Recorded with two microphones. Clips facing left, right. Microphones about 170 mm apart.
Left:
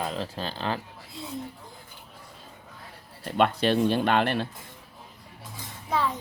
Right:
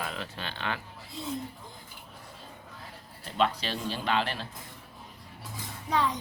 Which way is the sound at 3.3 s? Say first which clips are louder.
Left 6 dB; 55° left (ahead or behind).